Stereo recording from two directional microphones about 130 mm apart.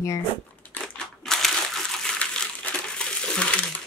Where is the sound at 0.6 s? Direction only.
10° left (ahead or behind).